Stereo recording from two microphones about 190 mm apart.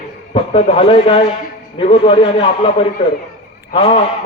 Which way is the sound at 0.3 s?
30° left (ahead or behind).